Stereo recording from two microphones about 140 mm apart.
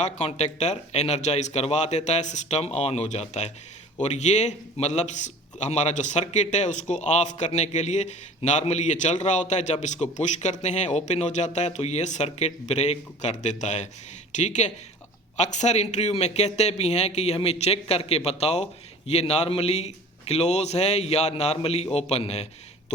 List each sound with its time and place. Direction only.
0.0 s a man's voice: 50° left (ahead or behind)